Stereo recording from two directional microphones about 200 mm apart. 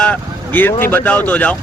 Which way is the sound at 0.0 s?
5° left (ahead or behind).